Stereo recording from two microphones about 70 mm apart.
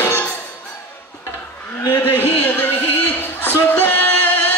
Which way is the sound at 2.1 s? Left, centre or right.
Left.